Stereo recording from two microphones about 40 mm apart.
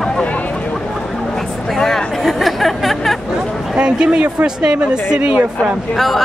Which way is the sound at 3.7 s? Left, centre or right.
Right.